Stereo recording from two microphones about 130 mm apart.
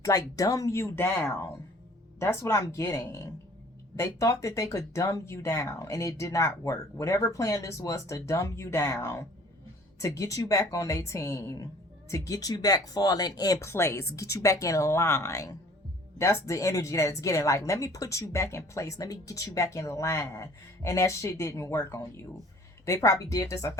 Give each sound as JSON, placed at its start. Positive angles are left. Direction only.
{"t": 0.0, "sound": "a woman's voice", "side_deg": 25}